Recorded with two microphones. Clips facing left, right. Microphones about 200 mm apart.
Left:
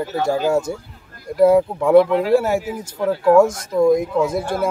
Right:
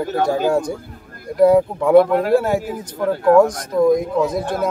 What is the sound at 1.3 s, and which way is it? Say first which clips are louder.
Speech: right 1 dB; 5° left (ahead or behind).